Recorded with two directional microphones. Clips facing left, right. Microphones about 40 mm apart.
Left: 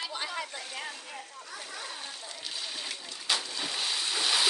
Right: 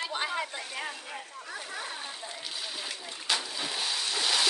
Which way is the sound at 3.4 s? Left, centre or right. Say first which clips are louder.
Even; centre.